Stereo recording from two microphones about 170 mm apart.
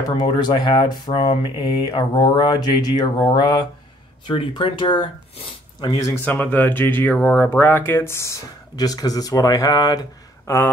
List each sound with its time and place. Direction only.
0.1 s speech: 25° left (ahead or behind)
6.2 s speech: 10° left (ahead or behind)